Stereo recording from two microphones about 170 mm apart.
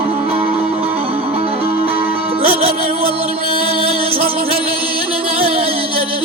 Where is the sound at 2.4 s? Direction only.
35° right (ahead or behind).